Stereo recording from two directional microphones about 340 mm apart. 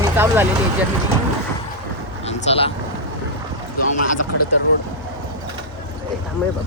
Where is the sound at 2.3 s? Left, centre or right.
Centre.